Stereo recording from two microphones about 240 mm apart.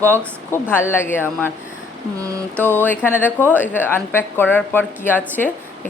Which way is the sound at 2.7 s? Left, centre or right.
Centre.